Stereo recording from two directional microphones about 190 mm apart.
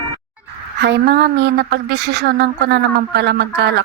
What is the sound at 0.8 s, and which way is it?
A woman's voice, 60° right (ahead or behind).